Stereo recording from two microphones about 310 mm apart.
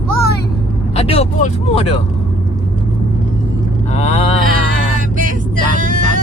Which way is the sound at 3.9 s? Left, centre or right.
Left.